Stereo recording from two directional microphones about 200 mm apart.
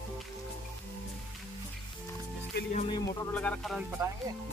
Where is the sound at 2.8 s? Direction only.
25° left (ahead or behind).